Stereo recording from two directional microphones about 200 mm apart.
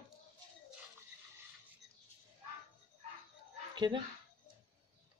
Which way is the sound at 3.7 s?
25° right (ahead or behind).